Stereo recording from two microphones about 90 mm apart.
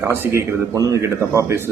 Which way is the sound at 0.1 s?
35° right (ahead or behind).